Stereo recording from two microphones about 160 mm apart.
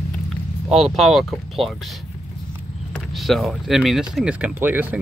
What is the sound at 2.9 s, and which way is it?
Speech, centre (ahead or behind).